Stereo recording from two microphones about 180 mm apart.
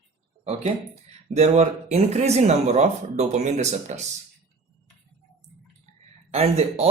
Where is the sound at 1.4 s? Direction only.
35° right (ahead or behind).